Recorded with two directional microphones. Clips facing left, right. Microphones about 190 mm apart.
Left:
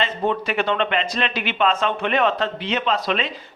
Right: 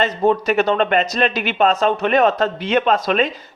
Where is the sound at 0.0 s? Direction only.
45° right (ahead or behind).